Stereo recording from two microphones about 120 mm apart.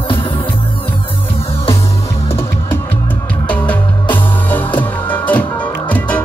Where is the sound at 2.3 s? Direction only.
20° left (ahead or behind).